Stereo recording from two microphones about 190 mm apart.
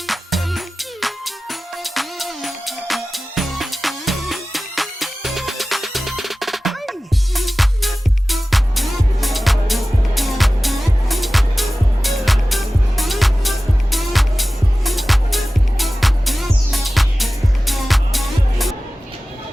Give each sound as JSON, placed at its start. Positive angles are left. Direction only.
{"t": 0.1, "sound": "music", "side_deg": 0}